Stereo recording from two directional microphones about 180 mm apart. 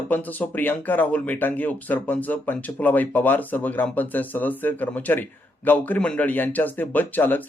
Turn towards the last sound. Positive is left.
turn(degrees=10)  # may be behind; listen again after turning